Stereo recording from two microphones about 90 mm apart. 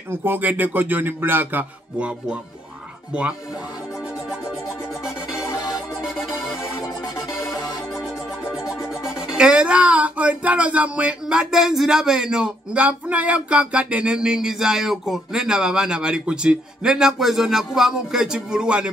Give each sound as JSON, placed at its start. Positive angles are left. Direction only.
{"t": 0.1, "sound": "speech", "side_deg": -25}
{"t": 5.4, "sound": "music", "side_deg": 35}
{"t": 7.2, "sound": "music", "side_deg": 35}
{"t": 8.5, "sound": "speech", "side_deg": -5}